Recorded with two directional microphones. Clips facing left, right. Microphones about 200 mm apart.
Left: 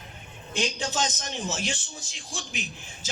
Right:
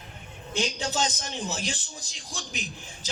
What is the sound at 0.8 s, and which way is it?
A man's voice, 35° right (ahead or behind).